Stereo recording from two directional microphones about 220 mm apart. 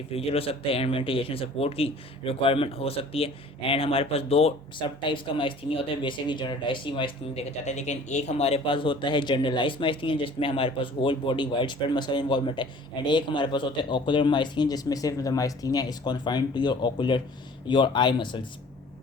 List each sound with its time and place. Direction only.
0.1 s speech: 25° left (ahead or behind)